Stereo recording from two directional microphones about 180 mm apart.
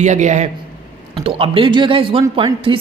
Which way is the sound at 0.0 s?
40° right (ahead or behind).